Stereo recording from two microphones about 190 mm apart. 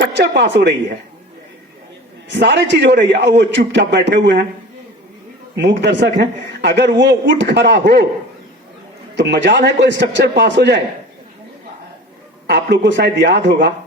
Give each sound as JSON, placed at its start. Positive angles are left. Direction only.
{"t": 0.1, "sound": "a man's voice", "side_deg": -70}
{"t": 2.3, "sound": "a man's voice", "side_deg": -65}
{"t": 5.5, "sound": "a man's voice", "side_deg": -65}
{"t": 9.1, "sound": "a man's voice", "side_deg": -65}
{"t": 12.7, "sound": "a man's voice", "side_deg": -65}